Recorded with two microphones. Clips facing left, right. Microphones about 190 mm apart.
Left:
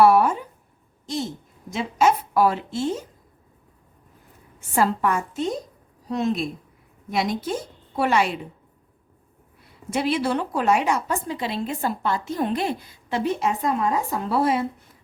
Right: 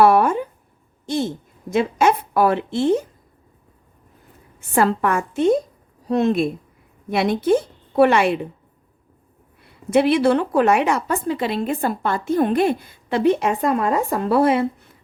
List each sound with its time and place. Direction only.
0.0 s a sound: 55° right (ahead or behind)
1.7 s a woman's voice: 60° right (ahead or behind)
4.7 s a woman's voice: 60° right (ahead or behind)
9.9 s a woman's voice: 60° right (ahead or behind)